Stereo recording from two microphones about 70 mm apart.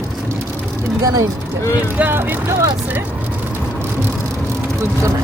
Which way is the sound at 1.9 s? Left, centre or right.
Right.